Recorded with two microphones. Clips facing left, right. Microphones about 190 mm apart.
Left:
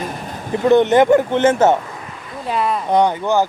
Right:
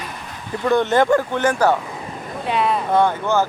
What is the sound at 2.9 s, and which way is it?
Speech, 15° left (ahead or behind).